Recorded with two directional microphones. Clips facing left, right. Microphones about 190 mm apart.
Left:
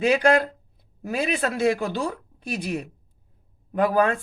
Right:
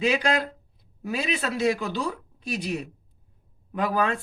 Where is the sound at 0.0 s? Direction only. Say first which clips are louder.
Left 5 dB; 50° left (ahead or behind).